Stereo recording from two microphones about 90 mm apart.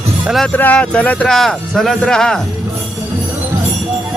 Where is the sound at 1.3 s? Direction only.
5° left (ahead or behind).